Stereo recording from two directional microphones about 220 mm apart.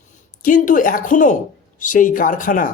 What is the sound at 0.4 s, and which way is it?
A man's voice, 35° left (ahead or behind).